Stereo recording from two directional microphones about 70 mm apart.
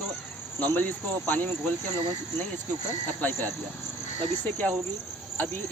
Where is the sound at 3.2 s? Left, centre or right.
Left.